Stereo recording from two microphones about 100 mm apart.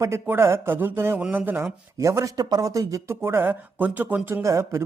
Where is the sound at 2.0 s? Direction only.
30° right (ahead or behind).